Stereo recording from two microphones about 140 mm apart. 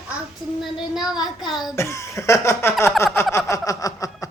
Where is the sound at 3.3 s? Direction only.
20° left (ahead or behind).